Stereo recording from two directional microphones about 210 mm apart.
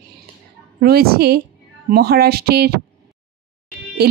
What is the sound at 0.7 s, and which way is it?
A woman's voice, 45° right (ahead or behind).